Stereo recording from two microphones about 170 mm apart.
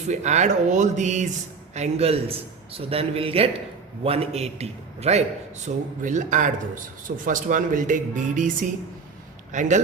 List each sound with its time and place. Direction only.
0.1 s a man's voice: 40° right (ahead or behind)